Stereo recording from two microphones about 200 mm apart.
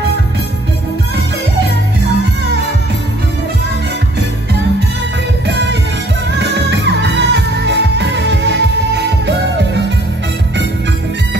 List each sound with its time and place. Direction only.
5.5 s music: 60° right (ahead or behind)